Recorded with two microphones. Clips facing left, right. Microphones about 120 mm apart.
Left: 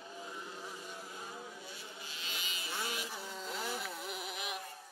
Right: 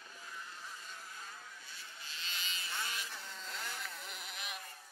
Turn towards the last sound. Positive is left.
turn(degrees=5)  # may be behind; listen again after turning